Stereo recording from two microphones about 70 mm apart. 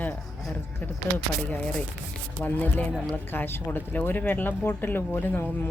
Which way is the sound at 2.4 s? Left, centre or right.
Left.